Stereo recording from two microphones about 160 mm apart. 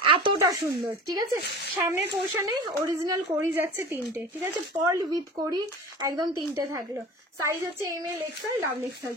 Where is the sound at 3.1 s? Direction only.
15° right (ahead or behind).